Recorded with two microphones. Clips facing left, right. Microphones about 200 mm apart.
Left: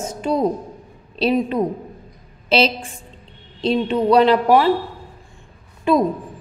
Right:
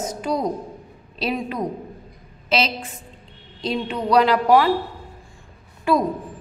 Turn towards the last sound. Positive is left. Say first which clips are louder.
# left 3 dB
turn(degrees=20)  # may be behind; listen again after turning